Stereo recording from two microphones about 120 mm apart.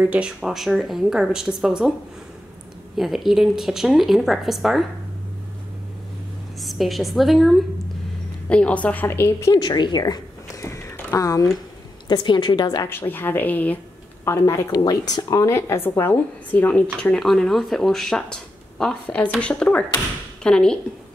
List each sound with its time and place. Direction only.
0.0 s speech: 10° right (ahead or behind)
3.0 s speech: centre (ahead or behind)
6.6 s a woman's voice: centre (ahead or behind)
8.5 s a woman's voice: 10° left (ahead or behind)
9.6 s speech: 35° left (ahead or behind)
12.1 s a woman's voice: 40° left (ahead or behind)
12.8 s a woman's voice: 20° left (ahead or behind)
14.2 s a woman's voice: 25° left (ahead or behind); by 20.8 s 5° left (ahead or behind)